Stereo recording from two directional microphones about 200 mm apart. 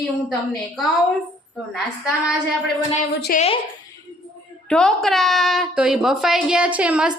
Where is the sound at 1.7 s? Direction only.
5° right (ahead or behind).